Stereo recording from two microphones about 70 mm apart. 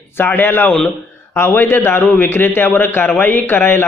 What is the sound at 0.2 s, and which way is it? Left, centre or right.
A man's voice, left.